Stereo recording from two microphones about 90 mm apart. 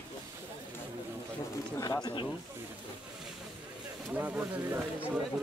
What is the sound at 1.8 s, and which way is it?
Speech, 50° left (ahead or behind).